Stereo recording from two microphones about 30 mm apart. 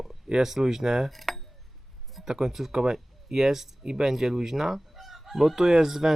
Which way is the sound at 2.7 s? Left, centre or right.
Centre.